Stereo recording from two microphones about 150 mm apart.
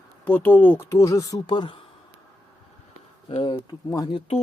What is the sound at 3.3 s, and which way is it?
Speech, 35° left (ahead or behind).